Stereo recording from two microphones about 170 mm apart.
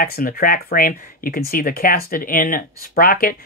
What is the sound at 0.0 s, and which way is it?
Speech, 60° left (ahead or behind).